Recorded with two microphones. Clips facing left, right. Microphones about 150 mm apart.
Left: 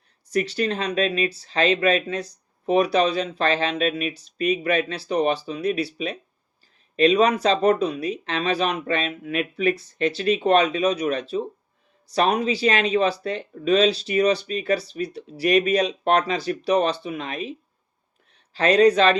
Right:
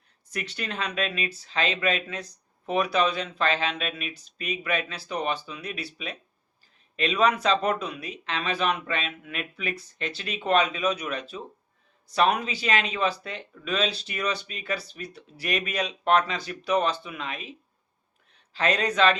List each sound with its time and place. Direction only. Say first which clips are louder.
0.3 s speech: left 11 dB; 35° left (ahead or behind)
18.5 s speech: left 9 dB; 40° left (ahead or behind)